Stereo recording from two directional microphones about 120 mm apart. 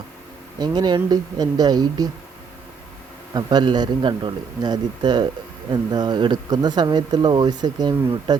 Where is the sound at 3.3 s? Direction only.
35° right (ahead or behind).